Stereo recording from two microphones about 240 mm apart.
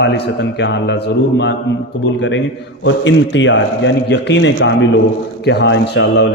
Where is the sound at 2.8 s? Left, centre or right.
Left.